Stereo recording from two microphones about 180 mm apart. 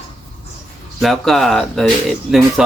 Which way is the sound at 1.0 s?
Centre (ahead or behind).